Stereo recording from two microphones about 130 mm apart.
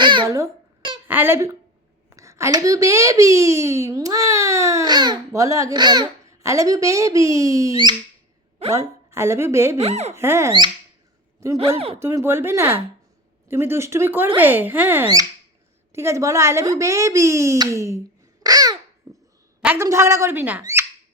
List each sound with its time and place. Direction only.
0.0 s a child's voice: 35° right (ahead or behind)
1.0 s a child's voice: 15° right (ahead or behind)
8.6 s a woman's voice: 50° right (ahead or behind)
9.0 s a woman's voice: 20° right (ahead or behind)
9.7 s speech: 55° right (ahead or behind)
10.2 s a child's voice: 20° right (ahead or behind)
11.9 s a child's voice: 20° right (ahead or behind)
19.1 s dog: 25° right (ahead or behind)
19.6 s a child's voice: 20° right (ahead or behind)